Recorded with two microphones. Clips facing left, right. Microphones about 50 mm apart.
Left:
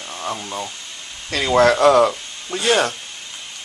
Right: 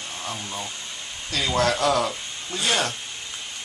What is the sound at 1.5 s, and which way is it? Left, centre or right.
Speech, left.